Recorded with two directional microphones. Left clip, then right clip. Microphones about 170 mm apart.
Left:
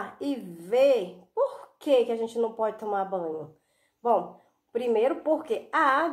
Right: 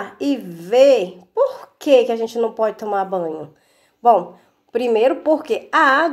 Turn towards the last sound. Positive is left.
turn(degrees=-30)  # may be behind; listen again after turning